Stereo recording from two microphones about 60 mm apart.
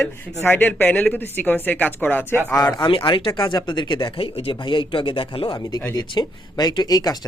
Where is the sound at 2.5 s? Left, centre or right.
Left.